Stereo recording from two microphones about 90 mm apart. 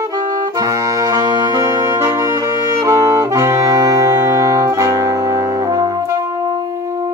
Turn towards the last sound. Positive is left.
turn(degrees=-45)  # may be behind; listen again after turning